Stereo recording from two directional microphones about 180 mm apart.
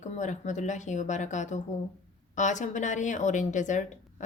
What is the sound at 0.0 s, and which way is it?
A woman's voice, 40° left (ahead or behind).